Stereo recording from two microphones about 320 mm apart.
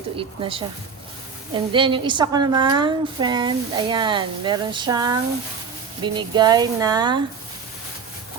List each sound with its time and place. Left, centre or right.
0.2 s a woman's voice: centre